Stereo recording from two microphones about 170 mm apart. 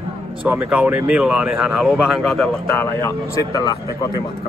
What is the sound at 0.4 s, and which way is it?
Speech, 5° right (ahead or behind).